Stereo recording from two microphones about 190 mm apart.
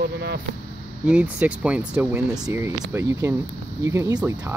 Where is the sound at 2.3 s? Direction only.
15° right (ahead or behind).